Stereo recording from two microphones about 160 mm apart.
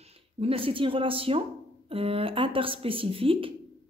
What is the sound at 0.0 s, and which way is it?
A woman's voice, 40° right (ahead or behind).